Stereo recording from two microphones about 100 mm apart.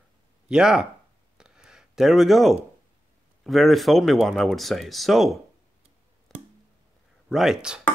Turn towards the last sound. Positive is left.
turn(degrees=-5)  # may be behind; listen again after turning